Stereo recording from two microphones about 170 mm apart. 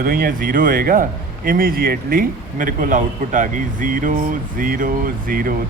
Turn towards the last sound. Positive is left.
turn(degrees=-55)  # may be behind; listen again after turning